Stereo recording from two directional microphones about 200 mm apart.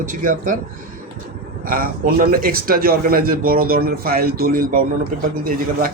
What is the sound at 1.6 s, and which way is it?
Speech, 45° right (ahead or behind).